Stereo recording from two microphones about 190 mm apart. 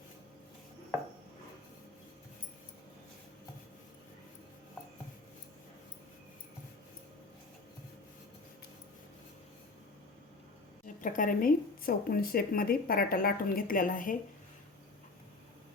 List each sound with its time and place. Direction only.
10.8 s a woman's voice: 45° left (ahead or behind)